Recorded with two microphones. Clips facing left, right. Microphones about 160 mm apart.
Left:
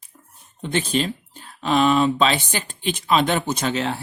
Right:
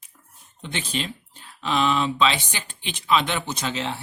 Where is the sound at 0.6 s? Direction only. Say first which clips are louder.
Left 7 dB; 40° left (ahead or behind).